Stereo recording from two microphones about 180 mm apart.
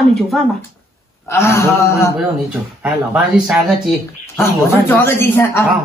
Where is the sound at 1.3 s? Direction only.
15° left (ahead or behind).